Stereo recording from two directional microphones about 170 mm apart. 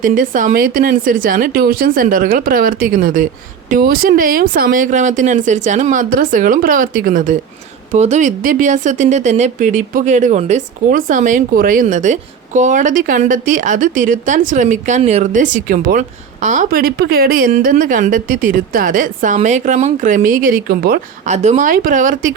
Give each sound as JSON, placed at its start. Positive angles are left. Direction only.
{"t": 0.0, "sound": "a woman's voice", "side_deg": -50}
{"t": 21.2, "sound": "speech", "side_deg": -45}